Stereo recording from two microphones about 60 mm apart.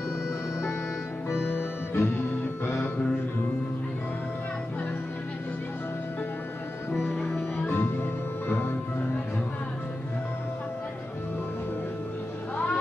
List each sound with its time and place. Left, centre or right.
1.3 s music: left
6.9 s music: left